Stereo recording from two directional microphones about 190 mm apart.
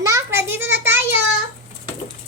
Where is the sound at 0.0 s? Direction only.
15° right (ahead or behind).